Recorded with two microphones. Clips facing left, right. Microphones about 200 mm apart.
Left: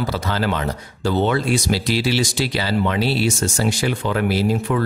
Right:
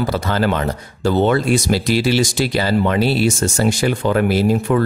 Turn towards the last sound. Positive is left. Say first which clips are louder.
# right 4 dB
turn(degrees=-50)  # may be behind; listen again after turning